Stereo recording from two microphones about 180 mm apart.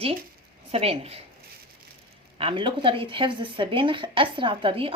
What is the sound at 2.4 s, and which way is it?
Speech, 30° right (ahead or behind).